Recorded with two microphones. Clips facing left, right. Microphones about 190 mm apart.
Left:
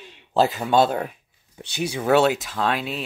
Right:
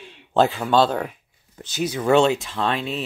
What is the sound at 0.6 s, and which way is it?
Speech, 10° left (ahead or behind).